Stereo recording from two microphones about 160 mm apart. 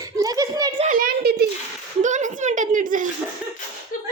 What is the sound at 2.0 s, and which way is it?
A child's voice, 50° right (ahead or behind).